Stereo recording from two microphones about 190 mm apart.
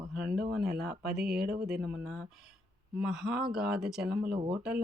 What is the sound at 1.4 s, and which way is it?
Speech, 55° right (ahead or behind).